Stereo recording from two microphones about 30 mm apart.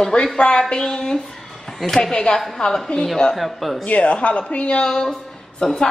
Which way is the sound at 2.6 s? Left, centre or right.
Left.